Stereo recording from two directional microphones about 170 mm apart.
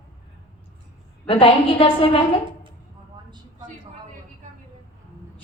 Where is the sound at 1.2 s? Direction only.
30° left (ahead or behind).